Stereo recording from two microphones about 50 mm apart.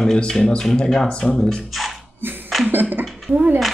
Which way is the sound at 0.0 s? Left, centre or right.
Centre.